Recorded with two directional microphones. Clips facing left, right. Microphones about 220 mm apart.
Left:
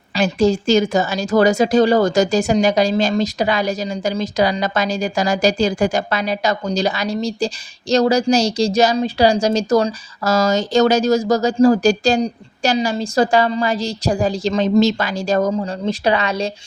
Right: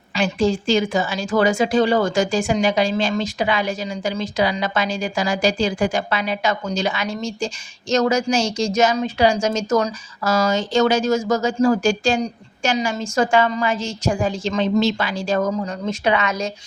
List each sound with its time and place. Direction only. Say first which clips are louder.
0.2 s a woman's voice: left 3 dB; 40° left (ahead or behind)